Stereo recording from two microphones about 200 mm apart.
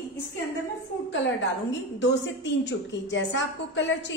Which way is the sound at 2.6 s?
65° left (ahead or behind).